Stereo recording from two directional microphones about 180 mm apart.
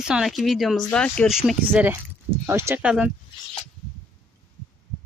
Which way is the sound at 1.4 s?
10° right (ahead or behind).